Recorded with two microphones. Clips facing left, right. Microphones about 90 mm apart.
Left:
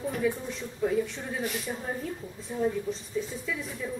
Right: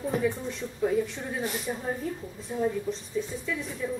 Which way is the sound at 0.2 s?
Centre (ahead or behind).